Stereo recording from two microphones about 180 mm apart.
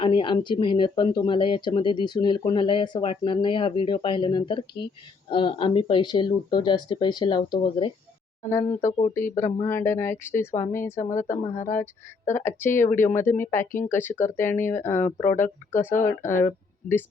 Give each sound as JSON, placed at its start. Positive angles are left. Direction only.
{"t": 0.0, "sound": "speech", "side_deg": 30}
{"t": 9.0, "sound": "speech", "side_deg": 15}